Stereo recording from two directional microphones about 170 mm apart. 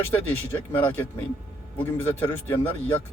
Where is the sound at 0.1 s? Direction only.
10° left (ahead or behind).